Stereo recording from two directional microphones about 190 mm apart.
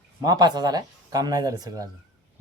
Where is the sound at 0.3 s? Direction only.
20° right (ahead or behind).